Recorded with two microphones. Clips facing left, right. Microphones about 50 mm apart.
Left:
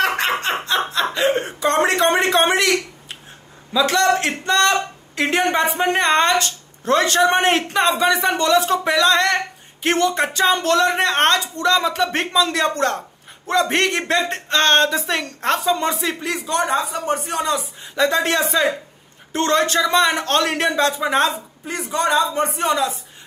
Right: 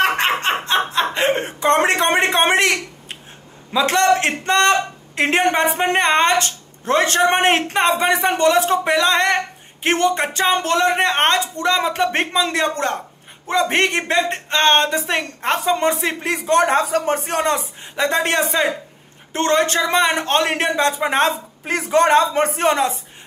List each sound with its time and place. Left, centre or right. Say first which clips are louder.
0.0 s snicker: right 2 dB; right
1.6 s speech: right 1 dB; right
17.0 s a man's voice: right 2 dB; right
17.9 s speech: even; right
21.3 s speech: right 5 dB; right